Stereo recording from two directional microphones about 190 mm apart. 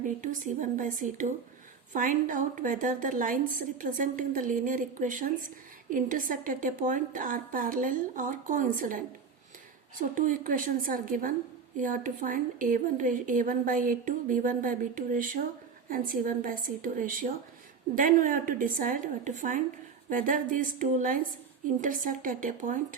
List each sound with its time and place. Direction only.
0.0 s a woman's voice: 45° right (ahead or behind)
10.0 s a woman's voice: 45° right (ahead or behind)